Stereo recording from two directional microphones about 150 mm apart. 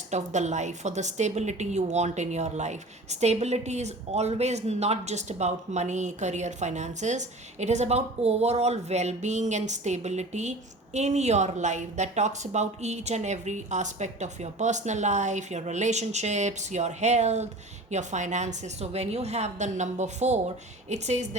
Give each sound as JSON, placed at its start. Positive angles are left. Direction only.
{"t": 0.1, "sound": "a woman's voice", "side_deg": -50}